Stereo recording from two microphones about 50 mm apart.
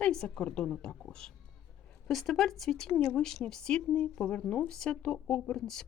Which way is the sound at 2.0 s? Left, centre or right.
Centre.